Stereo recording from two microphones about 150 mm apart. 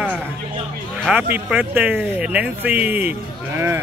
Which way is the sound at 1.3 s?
10° right (ahead or behind).